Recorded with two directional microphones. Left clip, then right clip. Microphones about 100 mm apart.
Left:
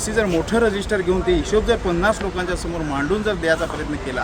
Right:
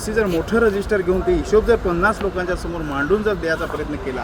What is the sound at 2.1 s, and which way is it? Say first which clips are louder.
Speech: even; 40° left (ahead or behind).